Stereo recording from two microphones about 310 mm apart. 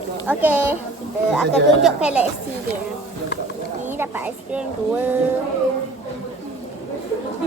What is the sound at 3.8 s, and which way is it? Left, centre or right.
Speech, centre.